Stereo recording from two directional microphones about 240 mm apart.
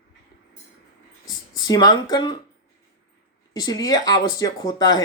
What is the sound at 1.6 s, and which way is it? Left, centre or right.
Speech, centre.